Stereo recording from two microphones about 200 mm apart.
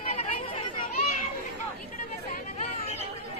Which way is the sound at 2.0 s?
35° left (ahead or behind).